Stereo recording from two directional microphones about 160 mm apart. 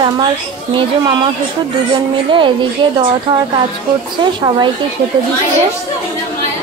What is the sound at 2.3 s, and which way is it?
Speech, 30° right (ahead or behind).